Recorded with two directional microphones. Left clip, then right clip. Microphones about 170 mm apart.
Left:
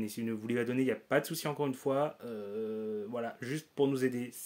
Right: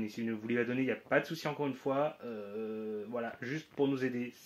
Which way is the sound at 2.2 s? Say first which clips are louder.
Left 2 dB; 25° left (ahead or behind).